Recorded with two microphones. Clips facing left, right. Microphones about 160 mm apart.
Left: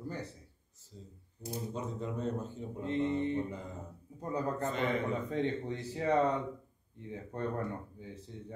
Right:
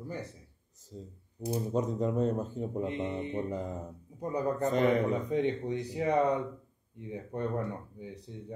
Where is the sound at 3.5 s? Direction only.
40° right (ahead or behind).